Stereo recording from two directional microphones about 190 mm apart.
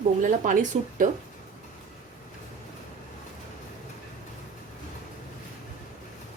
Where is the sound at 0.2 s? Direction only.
45° right (ahead or behind).